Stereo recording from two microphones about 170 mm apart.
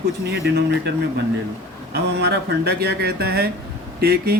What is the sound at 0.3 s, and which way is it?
Speech, 75° right (ahead or behind).